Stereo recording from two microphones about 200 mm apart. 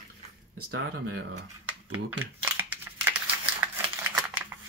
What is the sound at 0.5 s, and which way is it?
Speech, 90° right.